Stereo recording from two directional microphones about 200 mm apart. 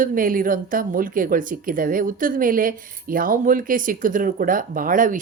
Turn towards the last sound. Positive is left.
turn(degrees=-40)  # may be behind; listen again after turning